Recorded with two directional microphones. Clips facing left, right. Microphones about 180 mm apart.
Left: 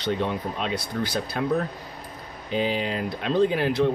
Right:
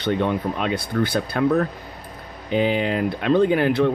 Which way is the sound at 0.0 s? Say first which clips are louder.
Right 5 dB; 55° right (ahead or behind).